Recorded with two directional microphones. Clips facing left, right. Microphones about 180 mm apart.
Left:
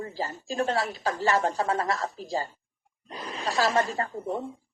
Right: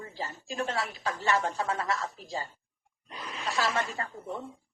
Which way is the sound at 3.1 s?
35° left (ahead or behind).